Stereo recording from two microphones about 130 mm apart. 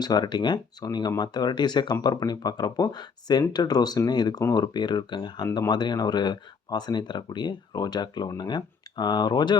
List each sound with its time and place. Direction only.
0.0 s speech: 30° left (ahead or behind)